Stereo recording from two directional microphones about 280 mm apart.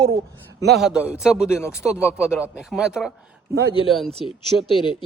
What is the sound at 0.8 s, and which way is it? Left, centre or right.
Speech, centre.